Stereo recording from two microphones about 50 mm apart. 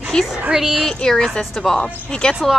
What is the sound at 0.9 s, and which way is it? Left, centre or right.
A woman's voice, centre.